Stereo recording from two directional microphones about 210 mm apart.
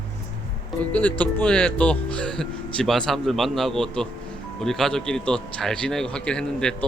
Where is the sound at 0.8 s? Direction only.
5° left (ahead or behind).